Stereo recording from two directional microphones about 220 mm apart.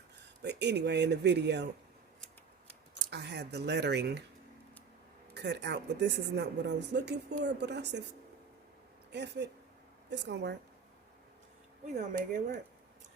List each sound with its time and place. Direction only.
0.4 s speech: 50° right (ahead or behind)
3.1 s speech: 50° right (ahead or behind)
5.3 s speech: 50° right (ahead or behind)
9.1 s speech: 50° right (ahead or behind)
11.9 s speech: 35° right (ahead or behind)